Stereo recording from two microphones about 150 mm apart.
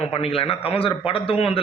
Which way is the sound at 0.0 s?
40° left (ahead or behind).